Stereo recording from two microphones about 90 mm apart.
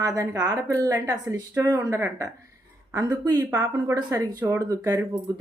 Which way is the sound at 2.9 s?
45° right (ahead or behind).